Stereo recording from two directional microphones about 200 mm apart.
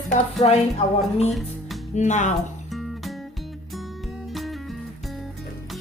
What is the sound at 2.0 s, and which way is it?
Speech, 35° left (ahead or behind).